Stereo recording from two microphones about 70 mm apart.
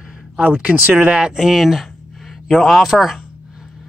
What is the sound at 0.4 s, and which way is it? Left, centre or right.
Speech, right.